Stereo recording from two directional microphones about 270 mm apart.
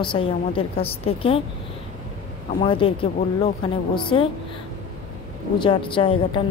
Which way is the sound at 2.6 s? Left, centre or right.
Centre.